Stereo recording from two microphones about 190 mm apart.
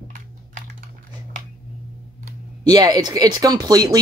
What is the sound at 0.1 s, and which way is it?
Typing, 40° right (ahead or behind).